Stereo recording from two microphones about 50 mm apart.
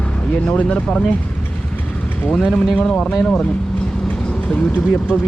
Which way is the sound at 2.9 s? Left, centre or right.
Left.